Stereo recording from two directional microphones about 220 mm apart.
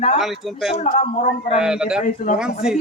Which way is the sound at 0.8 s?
35° left (ahead or behind).